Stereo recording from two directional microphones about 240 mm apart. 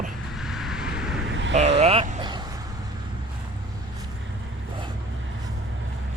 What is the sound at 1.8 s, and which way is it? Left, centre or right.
Vehicle, right.